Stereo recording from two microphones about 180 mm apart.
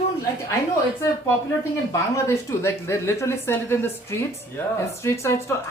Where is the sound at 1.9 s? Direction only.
15° left (ahead or behind).